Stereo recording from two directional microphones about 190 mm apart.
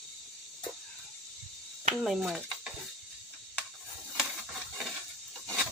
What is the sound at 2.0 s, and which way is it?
Speech, centre (ahead or behind).